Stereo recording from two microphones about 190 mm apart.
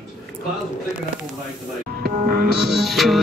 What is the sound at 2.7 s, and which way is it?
Speech, centre (ahead or behind).